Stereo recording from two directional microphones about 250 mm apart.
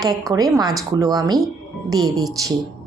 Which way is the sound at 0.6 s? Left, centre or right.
Centre.